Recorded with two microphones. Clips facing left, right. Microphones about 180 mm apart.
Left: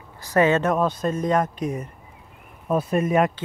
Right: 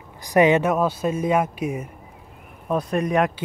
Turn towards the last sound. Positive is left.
turn(degrees=0)  # may be behind; listen again after turning